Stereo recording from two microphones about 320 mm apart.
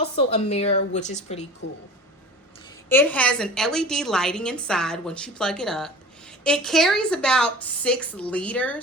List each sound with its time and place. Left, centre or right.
0.2 s speech: centre
2.9 s a woman's voice: centre